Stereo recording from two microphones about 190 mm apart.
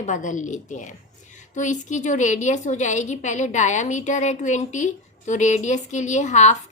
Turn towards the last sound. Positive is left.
turn(degrees=40)  # may be behind; listen again after turning